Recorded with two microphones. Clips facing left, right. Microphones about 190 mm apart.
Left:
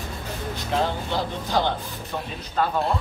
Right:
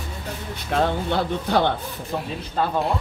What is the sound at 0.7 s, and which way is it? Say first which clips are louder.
Speech: right 4 dB; 60° right (ahead or behind).